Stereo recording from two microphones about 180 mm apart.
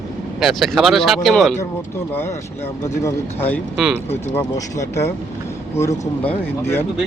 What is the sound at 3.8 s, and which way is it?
Speech, 5° right (ahead or behind).